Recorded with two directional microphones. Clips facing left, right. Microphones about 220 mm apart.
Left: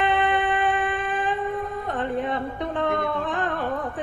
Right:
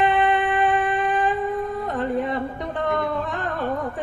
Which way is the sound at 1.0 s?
45° right (ahead or behind).